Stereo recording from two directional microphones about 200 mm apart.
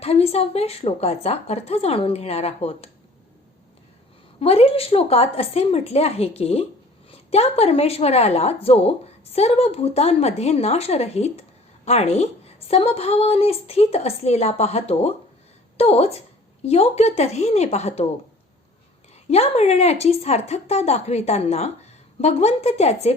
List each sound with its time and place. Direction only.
0.0 s a woman's voice: 30° left (ahead or behind)
4.4 s a woman's voice: 30° left (ahead or behind)
19.3 s a woman's voice: 30° left (ahead or behind)